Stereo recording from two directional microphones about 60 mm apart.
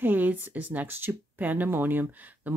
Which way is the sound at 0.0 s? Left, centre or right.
Right.